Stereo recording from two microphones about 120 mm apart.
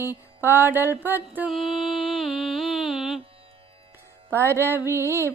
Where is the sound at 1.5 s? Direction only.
Centre (ahead or behind).